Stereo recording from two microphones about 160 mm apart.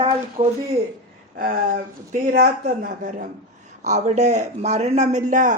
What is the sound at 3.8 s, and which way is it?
Speech, 45° right (ahead or behind).